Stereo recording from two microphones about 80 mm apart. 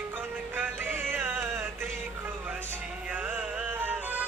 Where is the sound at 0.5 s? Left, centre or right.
Right.